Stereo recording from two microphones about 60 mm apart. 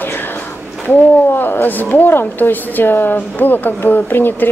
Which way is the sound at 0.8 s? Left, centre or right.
Left.